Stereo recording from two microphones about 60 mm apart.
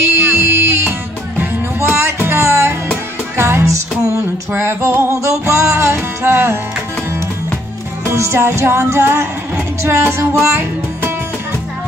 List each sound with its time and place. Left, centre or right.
0.0 s music: right
5.1 s music: right
8.1 s music: right